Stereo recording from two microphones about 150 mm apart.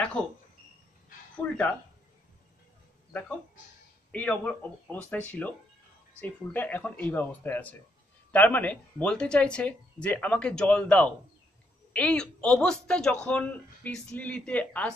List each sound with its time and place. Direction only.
1.4 s a man's voice: 10° left (ahead or behind)
3.1 s a man's voice: 10° left (ahead or behind)